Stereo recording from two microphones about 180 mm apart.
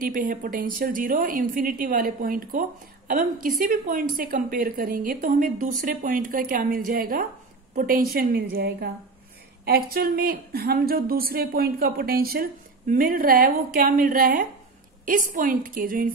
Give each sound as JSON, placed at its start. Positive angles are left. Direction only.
{"t": 0.0, "sound": "a woman's voice", "side_deg": -50}